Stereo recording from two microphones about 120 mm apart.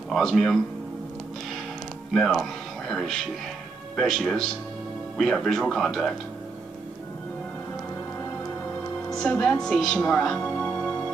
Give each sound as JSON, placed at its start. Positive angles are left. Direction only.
{"t": 0.1, "sound": "speech", "side_deg": 0}
{"t": 2.1, "sound": "speech", "side_deg": 0}
{"t": 9.1, "sound": "a woman's voice", "side_deg": 5}